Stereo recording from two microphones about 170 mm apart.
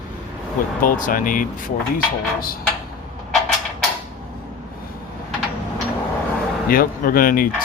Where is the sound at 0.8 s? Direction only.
50° left (ahead or behind).